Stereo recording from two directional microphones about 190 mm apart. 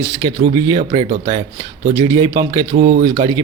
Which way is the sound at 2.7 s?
45° right (ahead or behind).